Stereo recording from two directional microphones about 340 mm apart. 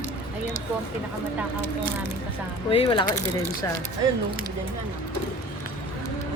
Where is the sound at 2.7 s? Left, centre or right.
Centre.